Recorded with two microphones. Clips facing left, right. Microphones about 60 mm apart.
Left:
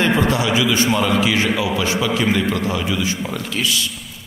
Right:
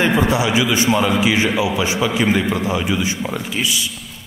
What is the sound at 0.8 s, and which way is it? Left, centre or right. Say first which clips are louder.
Speech: right 1 dB; centre.